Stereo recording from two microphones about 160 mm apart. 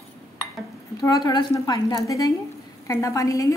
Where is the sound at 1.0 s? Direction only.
25° left (ahead or behind).